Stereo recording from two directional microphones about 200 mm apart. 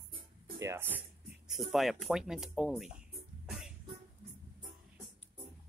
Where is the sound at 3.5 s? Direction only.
5° right (ahead or behind).